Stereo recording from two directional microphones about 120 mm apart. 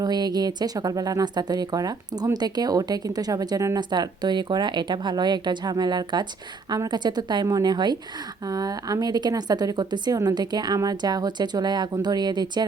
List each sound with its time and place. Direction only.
0.0 s speech: 35° right (ahead or behind)